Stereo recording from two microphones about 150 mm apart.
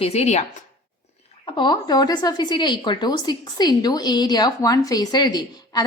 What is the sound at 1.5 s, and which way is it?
A woman's voice, 30° left (ahead or behind).